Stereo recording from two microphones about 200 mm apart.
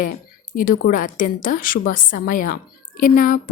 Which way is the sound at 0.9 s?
40° left (ahead or behind).